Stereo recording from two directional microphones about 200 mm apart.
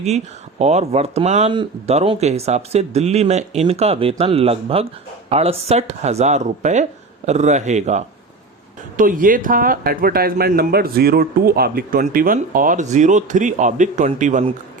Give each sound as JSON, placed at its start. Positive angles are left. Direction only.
{"t": 0.6, "sound": "speech", "side_deg": -35}